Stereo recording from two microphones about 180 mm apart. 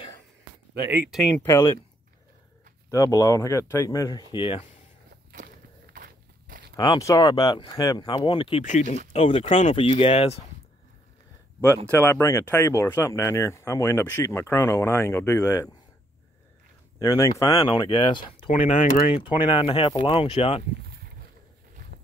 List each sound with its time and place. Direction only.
0.8 s speech: 10° right (ahead or behind)
1.4 s speech: 15° left (ahead or behind)
2.9 s speech: 20° left (ahead or behind)
4.3 s speech: 30° left (ahead or behind)
5.9 s biting: 50° right (ahead or behind)
6.8 s speech: 20° left (ahead or behind)
8.8 s speech: 45° right (ahead or behind)
9.1 s speech: 30° left (ahead or behind)
11.7 s speech: 15° left (ahead or behind)
17.0 s speech: 20° left (ahead or behind)
18.7 s speech: 45° left (ahead or behind)
19.2 s speech: 25° left (ahead or behind)
20.8 s a sound: 60° right (ahead or behind)